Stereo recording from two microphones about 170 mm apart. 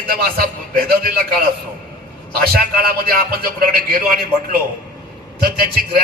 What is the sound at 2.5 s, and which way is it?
A man's voice, 60° right (ahead or behind).